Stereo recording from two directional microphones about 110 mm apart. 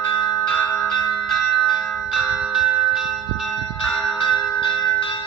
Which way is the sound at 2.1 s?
5° right (ahead or behind).